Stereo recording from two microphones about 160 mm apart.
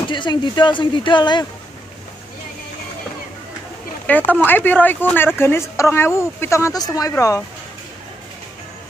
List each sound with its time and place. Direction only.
0.1 s speech: 30° left (ahead or behind)
4.3 s speech: 10° left (ahead or behind)